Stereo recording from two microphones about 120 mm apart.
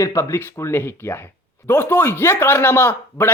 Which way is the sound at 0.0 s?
25° left (ahead or behind).